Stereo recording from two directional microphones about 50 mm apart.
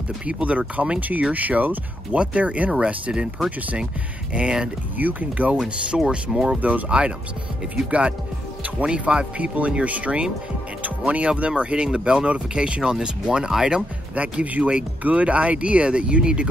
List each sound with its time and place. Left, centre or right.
0.3 s speech: right
4.3 s speech: centre
4.9 s speech: right
5.6 s speech: centre
14.1 s speech: right